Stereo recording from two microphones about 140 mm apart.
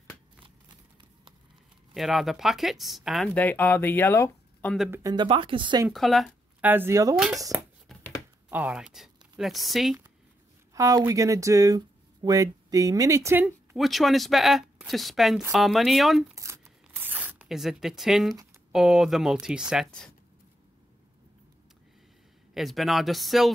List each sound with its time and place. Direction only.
2.0 s speech: centre (ahead or behind)
3.3 s speech: 10° left (ahead or behind)
5.1 s speech: 35° right (ahead or behind)
5.9 s speech: centre (ahead or behind)
6.6 s speech: 15° right (ahead or behind)
7.2 s speech: 5° right (ahead or behind)
7.9 s a sound: 5° left (ahead or behind)
8.5 s speech: 10° right (ahead or behind)
10.7 s speech: 25° right (ahead or behind)
13.7 s speech: centre (ahead or behind)
16.3 s tearing: 20° right (ahead or behind); by 18.3 s centre (ahead or behind)
18.7 s speech: 5° right (ahead or behind)
22.5 s speech: centre (ahead or behind)